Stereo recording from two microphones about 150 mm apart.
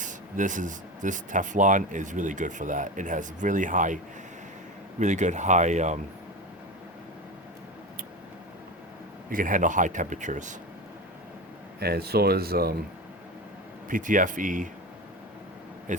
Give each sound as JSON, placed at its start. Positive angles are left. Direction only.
{"t": 0.0, "sound": "speech", "side_deg": -55}
{"t": 9.3, "sound": "speech", "side_deg": -65}
{"t": 11.8, "sound": "speech", "side_deg": -90}
{"t": 13.8, "sound": "speech", "side_deg": -60}
{"t": 15.9, "sound": "speech", "side_deg": -55}